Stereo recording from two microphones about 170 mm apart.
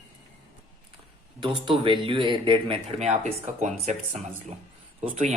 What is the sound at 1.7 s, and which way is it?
Speech, 30° right (ahead or behind).